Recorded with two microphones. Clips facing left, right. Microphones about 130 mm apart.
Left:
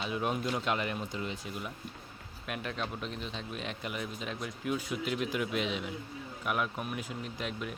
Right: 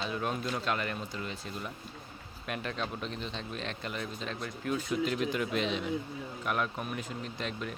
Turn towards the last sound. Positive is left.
turn(degrees=10)  # may be behind; listen again after turning